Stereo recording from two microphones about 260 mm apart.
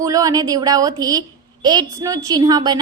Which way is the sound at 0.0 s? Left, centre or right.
Centre.